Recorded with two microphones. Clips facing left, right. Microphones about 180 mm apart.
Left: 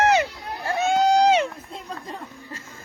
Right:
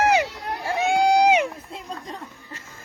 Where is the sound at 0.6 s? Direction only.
15° right (ahead or behind).